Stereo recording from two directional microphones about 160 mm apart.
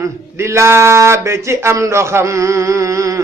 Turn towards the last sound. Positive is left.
turn(degrees=-20)  # may be behind; listen again after turning